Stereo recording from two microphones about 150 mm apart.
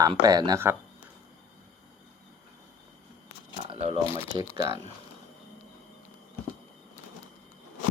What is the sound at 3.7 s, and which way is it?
Shuffling cards, 40° right (ahead or behind).